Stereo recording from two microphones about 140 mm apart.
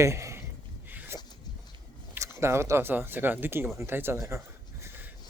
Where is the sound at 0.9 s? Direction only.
15° right (ahead or behind).